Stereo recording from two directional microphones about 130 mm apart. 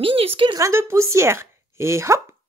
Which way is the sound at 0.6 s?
20° right (ahead or behind).